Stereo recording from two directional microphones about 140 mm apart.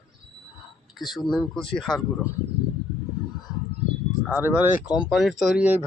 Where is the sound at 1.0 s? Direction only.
Centre (ahead or behind).